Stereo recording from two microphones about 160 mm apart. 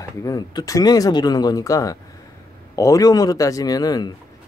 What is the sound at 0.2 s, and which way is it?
Speech, 25° left (ahead or behind).